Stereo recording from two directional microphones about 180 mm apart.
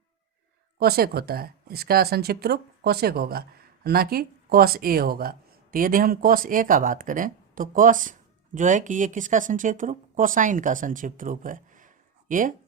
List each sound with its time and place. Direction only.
0.8 s speech: 60° right (ahead or behind)